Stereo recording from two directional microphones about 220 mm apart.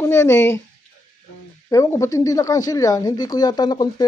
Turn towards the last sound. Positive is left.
turn(degrees=20)  # may be behind; listen again after turning